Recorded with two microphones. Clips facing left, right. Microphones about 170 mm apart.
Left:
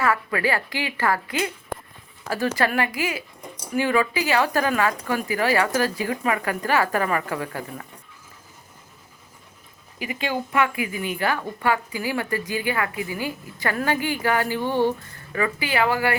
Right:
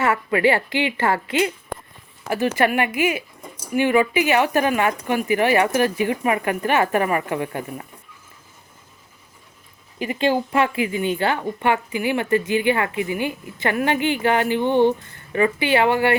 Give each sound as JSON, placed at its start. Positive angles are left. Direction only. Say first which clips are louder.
{"t": 0.0, "sound": "a woman's voice", "louder": "right 4 dB", "side_deg": -25}
{"t": 2.6, "sound": "a woman's voice", "louder": "right 5 dB", "side_deg": -20}
{"t": 10.2, "sound": "a woman's voice", "louder": "right 4 dB", "side_deg": -30}